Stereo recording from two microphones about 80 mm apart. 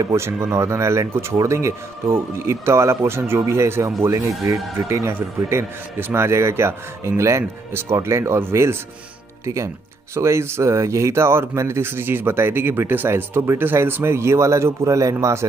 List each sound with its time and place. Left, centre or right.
0.1 s speech: right
10.1 s speech: right